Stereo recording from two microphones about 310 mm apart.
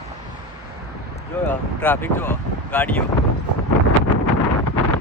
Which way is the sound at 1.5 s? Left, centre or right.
Centre.